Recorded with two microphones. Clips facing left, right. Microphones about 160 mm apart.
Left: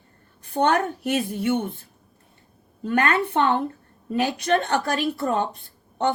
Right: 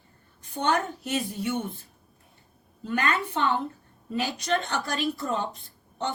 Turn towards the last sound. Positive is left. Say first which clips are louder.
# left 7 dB
turn(degrees=60)  # may be behind; listen again after turning